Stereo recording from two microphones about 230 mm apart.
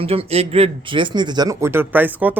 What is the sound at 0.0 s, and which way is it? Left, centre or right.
Speech, right.